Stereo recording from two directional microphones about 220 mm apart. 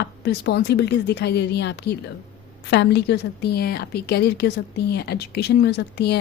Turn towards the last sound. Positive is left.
turn(degrees=50)  # may be behind; listen again after turning